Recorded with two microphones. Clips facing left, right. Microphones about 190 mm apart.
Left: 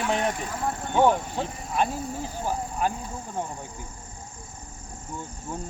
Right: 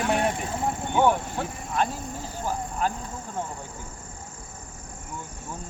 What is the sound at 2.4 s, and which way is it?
Cricket, 15° left (ahead or behind).